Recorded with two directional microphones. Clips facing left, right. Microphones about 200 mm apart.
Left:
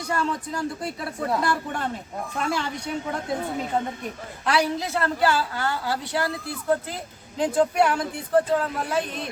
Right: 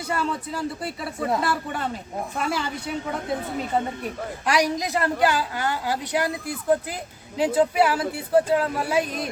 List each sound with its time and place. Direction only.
0.1 s speech: 5° right (ahead or behind)
4.0 s a woman's voice: 15° right (ahead or behind)